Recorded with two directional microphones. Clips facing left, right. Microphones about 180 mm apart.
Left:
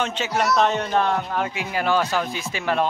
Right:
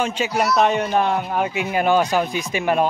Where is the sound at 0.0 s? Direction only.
10° right (ahead or behind).